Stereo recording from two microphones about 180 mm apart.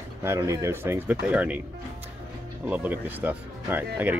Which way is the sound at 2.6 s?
10° right (ahead or behind).